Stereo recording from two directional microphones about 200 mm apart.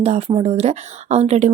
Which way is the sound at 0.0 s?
30° right (ahead or behind).